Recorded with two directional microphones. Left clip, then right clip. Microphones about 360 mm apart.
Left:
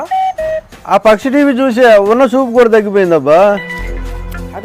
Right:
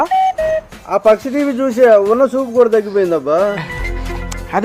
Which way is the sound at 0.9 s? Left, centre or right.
Left.